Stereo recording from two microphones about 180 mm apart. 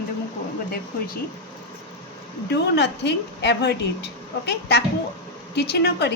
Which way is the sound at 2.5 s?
70° left (ahead or behind).